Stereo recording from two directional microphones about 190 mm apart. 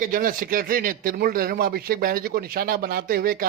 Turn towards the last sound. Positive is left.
turn(degrees=-50)  # may be behind; listen again after turning